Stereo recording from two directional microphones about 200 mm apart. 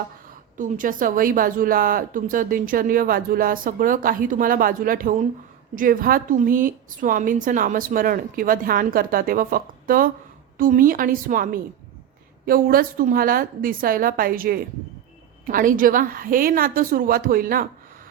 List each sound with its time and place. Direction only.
0.5 s a woman's voice: 40° right (ahead or behind)